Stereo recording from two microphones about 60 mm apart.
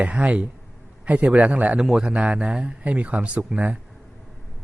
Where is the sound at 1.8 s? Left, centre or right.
Centre.